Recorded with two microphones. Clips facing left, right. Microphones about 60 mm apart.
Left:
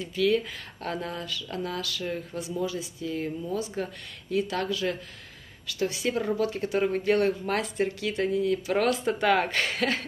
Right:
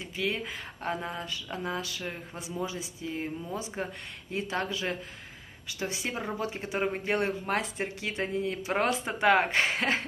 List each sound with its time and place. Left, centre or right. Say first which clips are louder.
0.0 s speech: left 7 dB; right